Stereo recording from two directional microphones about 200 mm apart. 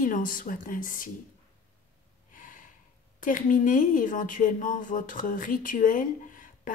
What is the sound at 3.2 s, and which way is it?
A woman's voice, 45° left (ahead or behind).